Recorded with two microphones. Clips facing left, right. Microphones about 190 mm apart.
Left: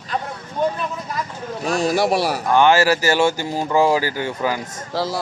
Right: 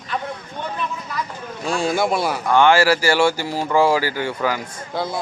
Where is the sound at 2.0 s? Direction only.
75° left (ahead or behind).